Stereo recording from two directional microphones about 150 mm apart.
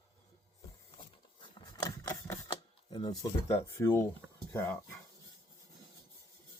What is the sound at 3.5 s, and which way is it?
Speech, 15° left (ahead or behind).